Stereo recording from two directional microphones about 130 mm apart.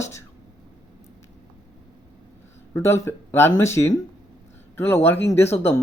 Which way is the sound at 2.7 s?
20° left (ahead or behind).